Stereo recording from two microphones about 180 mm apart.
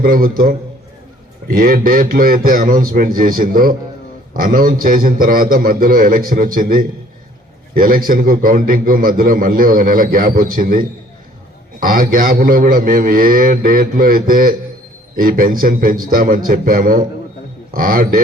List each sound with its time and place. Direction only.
0.0 s a man's voice: 55° right (ahead or behind)